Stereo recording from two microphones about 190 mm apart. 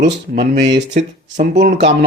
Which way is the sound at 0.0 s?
65° right (ahead or behind).